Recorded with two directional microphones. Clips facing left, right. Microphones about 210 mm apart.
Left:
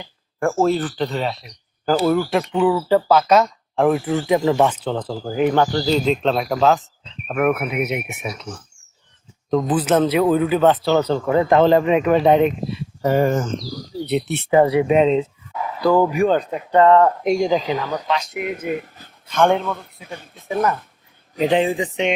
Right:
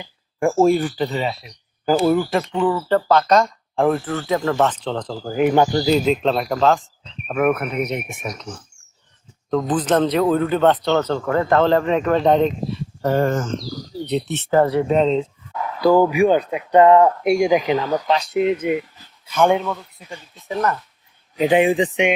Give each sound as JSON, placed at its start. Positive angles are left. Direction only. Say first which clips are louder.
{"t": 0.3, "sound": "speech", "louder": "right 3 dB", "side_deg": -10}
{"t": 2.4, "sound": "speech", "louder": "left 2 dB", "side_deg": 5}
{"t": 5.4, "sound": "speech", "louder": "right 2 dB", "side_deg": -10}
{"t": 9.5, "sound": "speech", "louder": "left 1 dB", "side_deg": 10}
{"t": 15.8, "sound": "speech", "louder": "right 2 dB", "side_deg": -5}
{"t": 18.1, "sound": "speech", "louder": "right 7 dB", "side_deg": -35}
{"t": 19.3, "sound": "speech", "louder": "even", "side_deg": -5}
{"t": 19.8, "sound": "speech", "louder": "left 2 dB", "side_deg": 55}
{"t": 21.5, "sound": "speech", "louder": "right 4 dB", "side_deg": -15}